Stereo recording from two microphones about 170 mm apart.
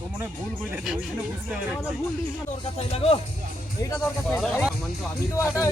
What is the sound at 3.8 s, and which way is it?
Speech, 15° left (ahead or behind).